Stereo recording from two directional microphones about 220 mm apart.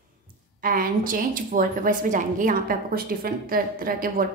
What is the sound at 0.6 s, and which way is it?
A woman's voice, 40° right (ahead or behind).